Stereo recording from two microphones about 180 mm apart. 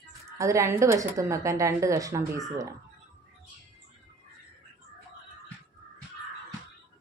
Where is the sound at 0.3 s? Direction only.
15° right (ahead or behind).